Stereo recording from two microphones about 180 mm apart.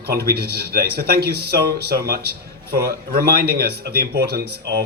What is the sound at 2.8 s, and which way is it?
Speech, 60° right (ahead or behind).